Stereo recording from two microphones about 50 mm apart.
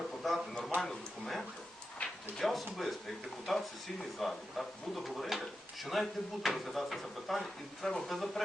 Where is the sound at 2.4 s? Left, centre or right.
Centre.